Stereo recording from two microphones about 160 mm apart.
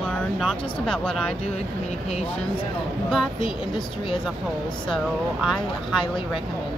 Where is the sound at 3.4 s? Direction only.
30° left (ahead or behind).